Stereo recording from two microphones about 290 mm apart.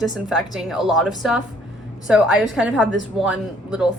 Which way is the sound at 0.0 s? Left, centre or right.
Centre.